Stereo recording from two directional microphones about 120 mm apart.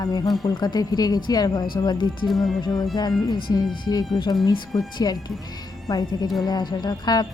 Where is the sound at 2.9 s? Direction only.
35° left (ahead or behind).